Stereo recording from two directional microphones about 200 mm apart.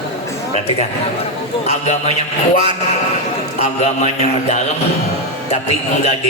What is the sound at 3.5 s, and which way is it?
A man's voice, 35° left (ahead or behind).